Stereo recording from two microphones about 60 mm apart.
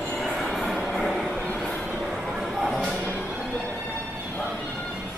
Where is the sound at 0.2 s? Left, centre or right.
Centre.